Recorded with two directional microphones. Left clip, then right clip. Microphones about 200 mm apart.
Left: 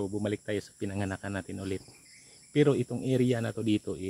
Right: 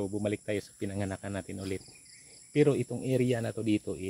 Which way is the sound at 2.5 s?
10° left (ahead or behind).